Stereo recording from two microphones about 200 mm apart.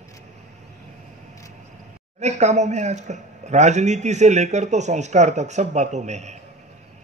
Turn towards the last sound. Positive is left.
turn(degrees=-35)  # may be behind; listen again after turning